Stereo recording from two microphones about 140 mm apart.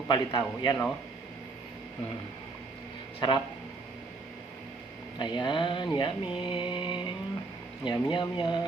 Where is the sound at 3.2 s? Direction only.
35° left (ahead or behind).